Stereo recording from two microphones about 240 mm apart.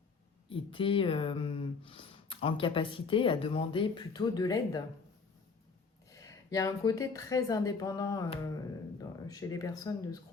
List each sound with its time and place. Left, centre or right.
0.4 s speech: left
6.1 s a woman's voice: centre